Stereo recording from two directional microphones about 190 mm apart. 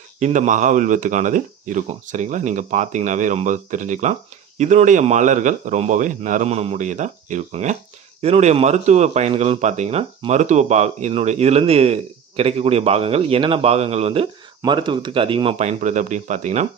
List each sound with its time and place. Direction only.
0.2 s speech: 40° right (ahead or behind)